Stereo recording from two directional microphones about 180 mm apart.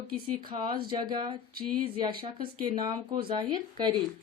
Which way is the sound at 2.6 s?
25° right (ahead or behind).